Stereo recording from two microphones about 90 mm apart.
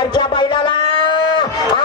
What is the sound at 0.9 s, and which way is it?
Livestock, 60° left (ahead or behind).